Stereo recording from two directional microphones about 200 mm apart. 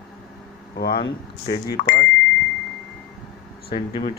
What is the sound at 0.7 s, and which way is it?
Speech, 50° left (ahead or behind).